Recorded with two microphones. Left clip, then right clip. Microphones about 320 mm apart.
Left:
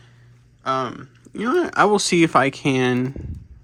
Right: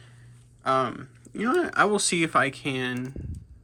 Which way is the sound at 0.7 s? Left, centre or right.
Centre.